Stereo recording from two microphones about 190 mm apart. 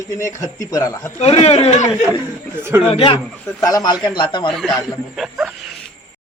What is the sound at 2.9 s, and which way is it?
Speech, 30° left (ahead or behind).